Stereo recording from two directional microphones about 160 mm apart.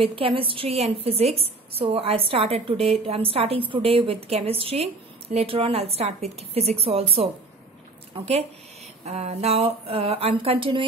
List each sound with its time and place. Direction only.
0.0 s a woman's voice: 35° right (ahead or behind)